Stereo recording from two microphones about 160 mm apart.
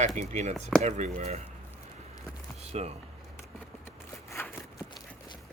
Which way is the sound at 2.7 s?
40° right (ahead or behind).